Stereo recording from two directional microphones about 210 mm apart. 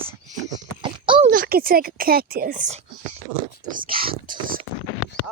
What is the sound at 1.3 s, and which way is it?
Speech, 45° right (ahead or behind).